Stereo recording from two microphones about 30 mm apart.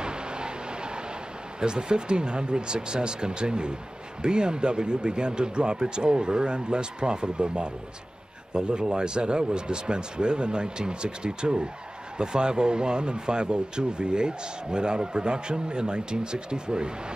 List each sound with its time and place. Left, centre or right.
0.0 s vehicle: right
1.6 s speech: right